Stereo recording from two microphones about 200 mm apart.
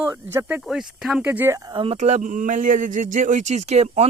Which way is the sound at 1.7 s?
25° right (ahead or behind).